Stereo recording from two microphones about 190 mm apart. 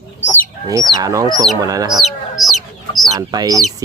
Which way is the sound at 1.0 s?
20° right (ahead or behind).